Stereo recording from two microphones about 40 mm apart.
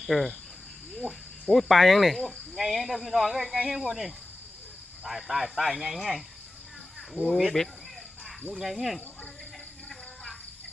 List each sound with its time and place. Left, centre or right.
0.0 s cricket: centre
1.5 s cricket: centre
3.7 s speech: centre
7.2 s speech: left
7.6 s speech: centre
8.5 s cricket: centre